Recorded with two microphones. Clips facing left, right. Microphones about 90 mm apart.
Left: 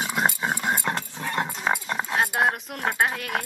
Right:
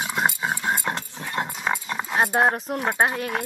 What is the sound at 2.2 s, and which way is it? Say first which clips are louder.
Speech: right 5 dB; 30° right (ahead or behind).